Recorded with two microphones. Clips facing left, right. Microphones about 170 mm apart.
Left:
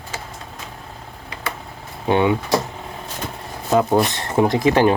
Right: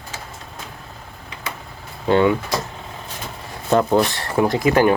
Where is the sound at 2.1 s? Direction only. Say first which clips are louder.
Right 2 dB; 15° left (ahead or behind).